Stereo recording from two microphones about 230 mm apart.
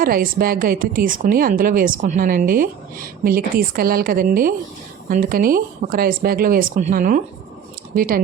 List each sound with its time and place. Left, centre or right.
0.0 s a woman's voice: right